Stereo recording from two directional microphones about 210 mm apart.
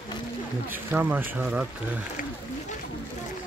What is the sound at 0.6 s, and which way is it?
Speech, 10° right (ahead or behind).